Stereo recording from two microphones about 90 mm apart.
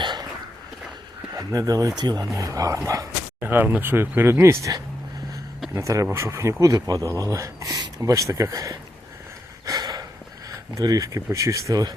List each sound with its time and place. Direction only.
0.0 s a sound: 55° right (ahead or behind)
1.4 s speech: 40° right (ahead or behind)
2.3 s speech: 40° right (ahead or behind)
3.4 s speech: 20° right (ahead or behind); by 8.8 s 40° right (ahead or behind)
9.6 s a sound: 45° right (ahead or behind)
10.8 s speech: 40° right (ahead or behind)